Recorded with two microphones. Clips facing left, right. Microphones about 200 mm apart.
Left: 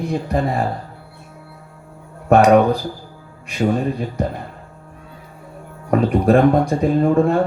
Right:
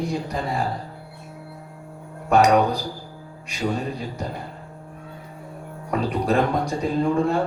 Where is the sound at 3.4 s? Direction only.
55° left (ahead or behind).